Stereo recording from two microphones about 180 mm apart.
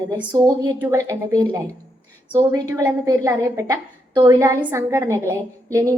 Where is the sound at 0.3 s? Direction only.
20° right (ahead or behind).